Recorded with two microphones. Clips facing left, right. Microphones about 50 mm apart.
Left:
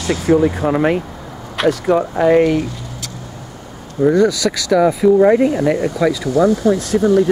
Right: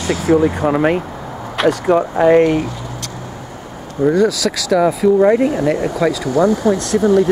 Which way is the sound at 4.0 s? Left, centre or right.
Centre.